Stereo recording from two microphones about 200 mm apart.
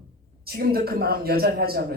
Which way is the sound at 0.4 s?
50° right (ahead or behind).